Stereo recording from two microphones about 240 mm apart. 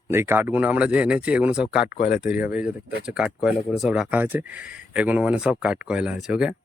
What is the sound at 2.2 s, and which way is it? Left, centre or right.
Speech, centre.